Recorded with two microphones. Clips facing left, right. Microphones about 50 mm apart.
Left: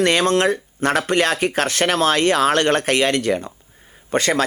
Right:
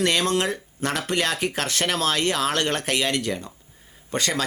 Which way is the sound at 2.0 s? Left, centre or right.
Left.